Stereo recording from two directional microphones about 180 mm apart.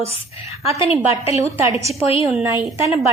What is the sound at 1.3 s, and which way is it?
A woman's voice, 15° right (ahead or behind).